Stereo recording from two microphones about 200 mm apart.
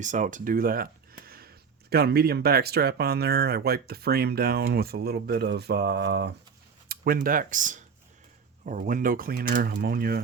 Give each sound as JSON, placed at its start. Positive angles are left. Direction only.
{"t": 0.0, "sound": "speech", "side_deg": -40}